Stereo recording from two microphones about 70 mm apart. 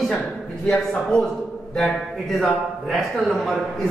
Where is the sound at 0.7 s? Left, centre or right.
Centre.